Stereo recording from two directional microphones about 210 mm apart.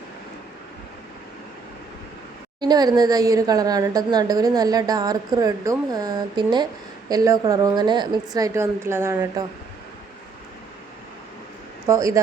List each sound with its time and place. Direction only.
2.6 s a woman's voice: 20° right (ahead or behind)
11.9 s a woman's voice: 15° right (ahead or behind)